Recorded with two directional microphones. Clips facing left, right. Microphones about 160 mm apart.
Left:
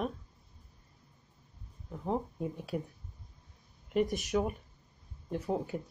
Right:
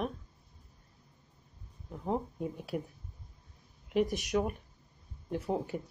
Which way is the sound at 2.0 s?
Centre (ahead or behind).